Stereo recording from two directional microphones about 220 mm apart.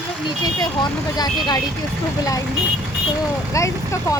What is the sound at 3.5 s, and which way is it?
Speech, 15° left (ahead or behind).